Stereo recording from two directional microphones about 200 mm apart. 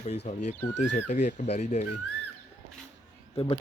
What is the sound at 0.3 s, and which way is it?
Speech, 40° left (ahead or behind).